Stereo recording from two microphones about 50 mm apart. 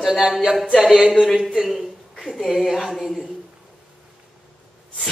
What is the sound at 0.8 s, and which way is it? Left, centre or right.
Speech, centre.